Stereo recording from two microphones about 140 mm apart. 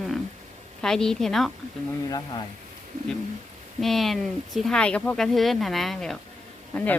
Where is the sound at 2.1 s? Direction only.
30° left (ahead or behind).